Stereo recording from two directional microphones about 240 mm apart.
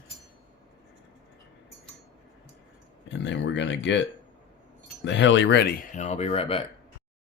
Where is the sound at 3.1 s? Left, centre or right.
Left.